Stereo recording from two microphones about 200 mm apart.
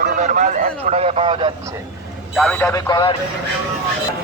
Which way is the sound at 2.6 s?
20° left (ahead or behind).